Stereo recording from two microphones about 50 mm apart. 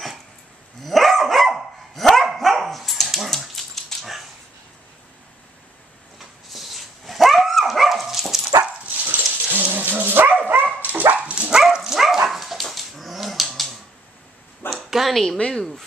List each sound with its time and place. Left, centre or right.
0.8 s dog: centre
6.1 s dog: centre
9.0 s dog: right
11.5 s dog: centre
14.9 s a sound: centre
15.3 s a woman's voice: centre